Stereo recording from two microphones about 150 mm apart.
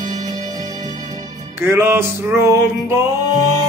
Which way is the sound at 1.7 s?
15° right (ahead or behind).